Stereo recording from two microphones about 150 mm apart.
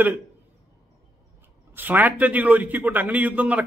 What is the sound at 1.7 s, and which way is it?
A man's voice, 10° right (ahead or behind).